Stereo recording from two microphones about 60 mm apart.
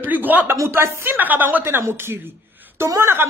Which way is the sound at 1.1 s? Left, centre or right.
Right.